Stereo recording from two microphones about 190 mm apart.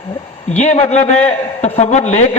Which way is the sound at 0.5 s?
40° left (ahead or behind).